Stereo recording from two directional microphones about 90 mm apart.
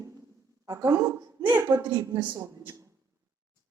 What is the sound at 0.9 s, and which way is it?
Speech, 25° right (ahead or behind).